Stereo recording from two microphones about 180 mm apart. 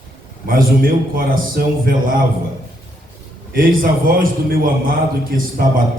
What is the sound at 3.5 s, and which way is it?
A man's voice, 50° right (ahead or behind).